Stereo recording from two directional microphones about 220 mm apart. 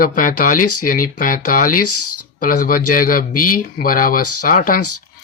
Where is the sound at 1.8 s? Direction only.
90° left.